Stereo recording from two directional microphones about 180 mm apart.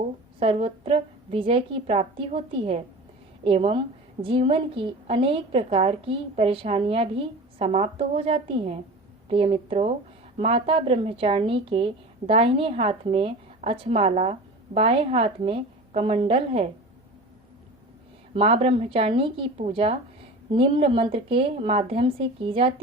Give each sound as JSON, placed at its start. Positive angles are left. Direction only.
{"t": 0.3, "sound": "a woman's voice", "side_deg": -30}
{"t": 18.3, "sound": "a woman's voice", "side_deg": -30}